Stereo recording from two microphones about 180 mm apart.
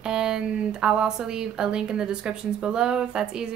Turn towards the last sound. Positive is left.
turn(degrees=-5)  # may be behind; listen again after turning